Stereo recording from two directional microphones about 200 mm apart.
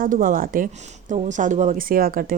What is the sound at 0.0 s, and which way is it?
Speech, 45° right (ahead or behind).